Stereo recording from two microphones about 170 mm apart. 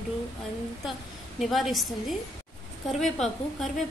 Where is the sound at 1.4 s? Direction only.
Centre (ahead or behind).